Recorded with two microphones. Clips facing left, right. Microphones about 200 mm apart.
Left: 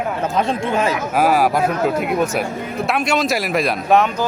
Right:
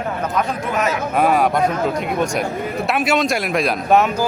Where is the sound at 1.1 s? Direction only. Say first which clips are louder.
Even; 5° left (ahead or behind).